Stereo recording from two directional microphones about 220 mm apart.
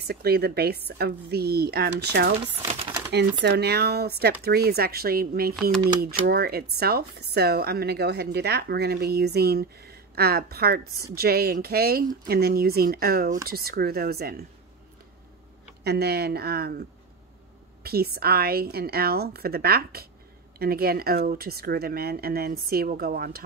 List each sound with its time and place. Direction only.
0.0 s speech: 45° right (ahead or behind)
2.7 s speech: 25° right (ahead or behind)
3.4 s speech: 45° right (ahead or behind)
15.8 s speech: 45° right (ahead or behind)
17.8 s speech: 45° right (ahead or behind)